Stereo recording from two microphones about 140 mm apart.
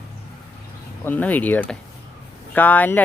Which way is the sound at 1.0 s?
10° left (ahead or behind).